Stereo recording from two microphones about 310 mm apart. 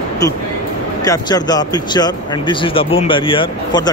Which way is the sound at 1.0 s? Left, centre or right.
Centre.